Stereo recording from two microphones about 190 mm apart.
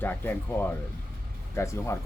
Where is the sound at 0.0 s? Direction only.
10° left (ahead or behind).